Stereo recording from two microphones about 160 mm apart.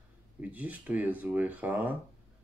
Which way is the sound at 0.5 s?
10° right (ahead or behind).